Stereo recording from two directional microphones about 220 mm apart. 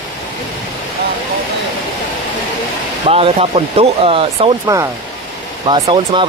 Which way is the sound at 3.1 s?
25° right (ahead or behind).